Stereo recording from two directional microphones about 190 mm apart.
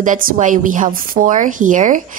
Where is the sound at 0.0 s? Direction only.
45° right (ahead or behind).